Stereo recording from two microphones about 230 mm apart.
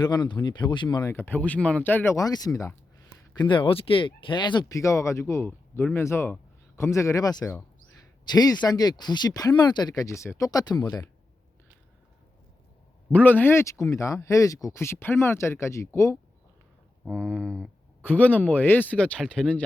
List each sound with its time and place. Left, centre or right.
0.0 s speech: centre
13.1 s speech: centre
17.1 s speech: centre
18.0 s speech: centre